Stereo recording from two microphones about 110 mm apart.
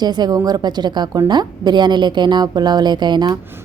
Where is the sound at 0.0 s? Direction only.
40° right (ahead or behind).